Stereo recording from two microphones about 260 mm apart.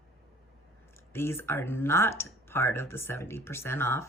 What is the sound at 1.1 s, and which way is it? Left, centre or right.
A woman's voice, centre.